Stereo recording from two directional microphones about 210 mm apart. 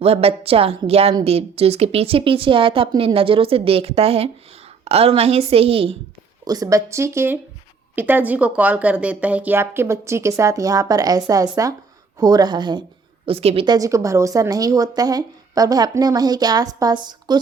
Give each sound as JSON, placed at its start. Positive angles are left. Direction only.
{"t": 0.0, "sound": "a woman's voice", "side_deg": -30}